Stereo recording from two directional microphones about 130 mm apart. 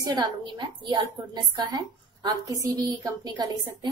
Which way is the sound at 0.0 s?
30° right (ahead or behind).